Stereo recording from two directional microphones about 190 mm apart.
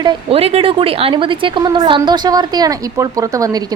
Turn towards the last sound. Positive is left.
turn(degrees=-20)  # may be behind; listen again after turning